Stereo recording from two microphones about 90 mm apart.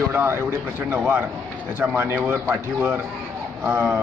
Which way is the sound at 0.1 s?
20° right (ahead or behind).